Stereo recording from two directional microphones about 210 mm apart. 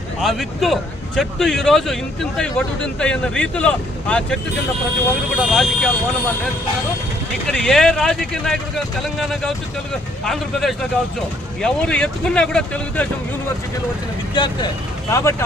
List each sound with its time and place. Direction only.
0.2 s speech: centre (ahead or behind)
5.4 s speech: centre (ahead or behind)
7.4 s speech: centre (ahead or behind)
14.3 s speech: 20° left (ahead or behind)